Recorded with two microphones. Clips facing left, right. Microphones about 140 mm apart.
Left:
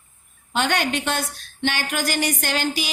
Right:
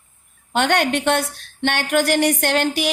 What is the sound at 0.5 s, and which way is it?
A woman's voice, 65° right (ahead or behind).